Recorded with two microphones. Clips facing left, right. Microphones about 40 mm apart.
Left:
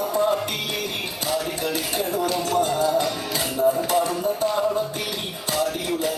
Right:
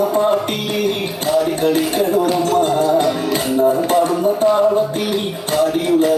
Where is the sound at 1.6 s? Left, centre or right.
Right.